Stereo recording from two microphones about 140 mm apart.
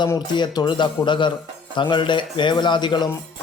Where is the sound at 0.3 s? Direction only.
30° left (ahead or behind).